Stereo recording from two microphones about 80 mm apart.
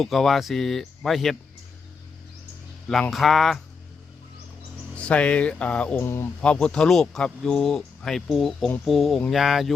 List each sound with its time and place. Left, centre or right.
0.0 s speech: centre
3.1 s speech: centre
4.9 s speech: centre
6.0 s speech: left
6.4 s speech: centre